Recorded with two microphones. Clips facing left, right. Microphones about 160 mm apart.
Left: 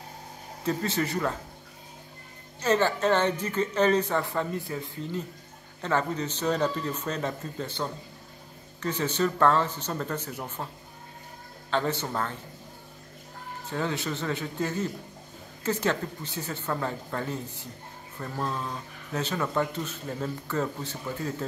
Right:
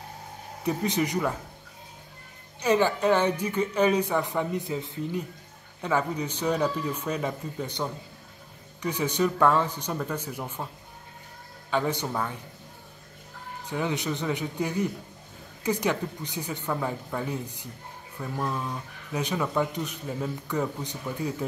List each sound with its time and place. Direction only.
0.7 s a woman's voice: 15° right (ahead or behind)
2.6 s a woman's voice: 10° right (ahead or behind)
11.7 s a woman's voice: 10° right (ahead or behind)
13.7 s a woman's voice: 15° right (ahead or behind)